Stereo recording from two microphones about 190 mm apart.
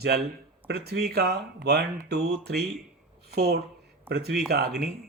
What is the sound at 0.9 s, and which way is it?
Speech, 55° right (ahead or behind).